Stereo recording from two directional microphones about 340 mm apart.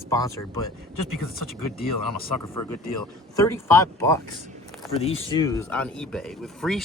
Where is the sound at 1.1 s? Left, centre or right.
Left.